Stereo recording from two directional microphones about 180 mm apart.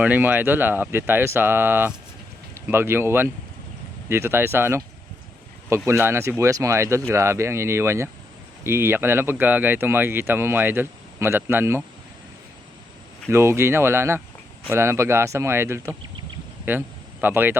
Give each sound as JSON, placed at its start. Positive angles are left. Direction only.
{"t": 0.0, "sound": "speech", "side_deg": -10}
{"t": 13.3, "sound": "speech", "side_deg": -15}